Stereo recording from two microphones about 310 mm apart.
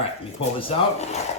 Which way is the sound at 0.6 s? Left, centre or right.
Centre.